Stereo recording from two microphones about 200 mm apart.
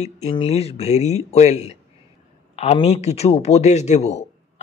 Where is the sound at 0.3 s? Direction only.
30° left (ahead or behind).